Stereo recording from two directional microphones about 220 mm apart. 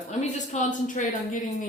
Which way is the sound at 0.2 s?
35° left (ahead or behind).